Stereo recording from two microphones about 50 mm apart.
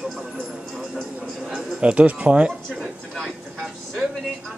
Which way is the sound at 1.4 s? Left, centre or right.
Centre.